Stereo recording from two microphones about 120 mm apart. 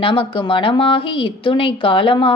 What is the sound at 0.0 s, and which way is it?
A woman's voice, 45° left (ahead or behind).